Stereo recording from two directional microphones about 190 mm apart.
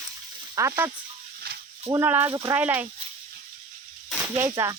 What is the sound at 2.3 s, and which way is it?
Speech, 20° right (ahead or behind).